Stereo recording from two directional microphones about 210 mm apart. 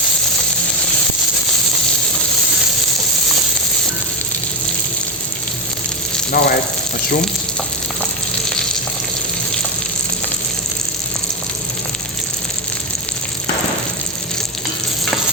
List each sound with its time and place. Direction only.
6.4 s speech: 45° left (ahead or behind)